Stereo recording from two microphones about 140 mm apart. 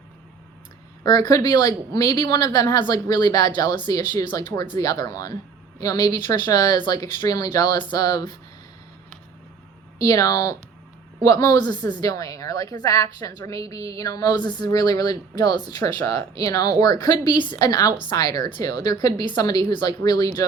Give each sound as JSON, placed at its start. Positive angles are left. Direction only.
{"t": 1.0, "sound": "a woman's voice", "side_deg": 25}
{"t": 10.0, "sound": "a woman's voice", "side_deg": 25}